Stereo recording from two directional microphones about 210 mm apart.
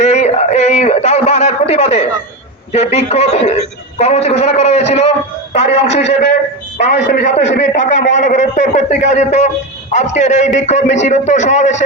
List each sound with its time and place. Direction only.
0.0 s a man's voice: 30° left (ahead or behind)
6.8 s a man's voice: 55° left (ahead or behind)
7.1 s a man's voice: 35° left (ahead or behind)